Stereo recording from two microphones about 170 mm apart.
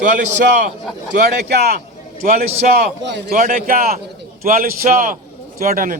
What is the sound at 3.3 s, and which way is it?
A man's voice, 50° right (ahead or behind).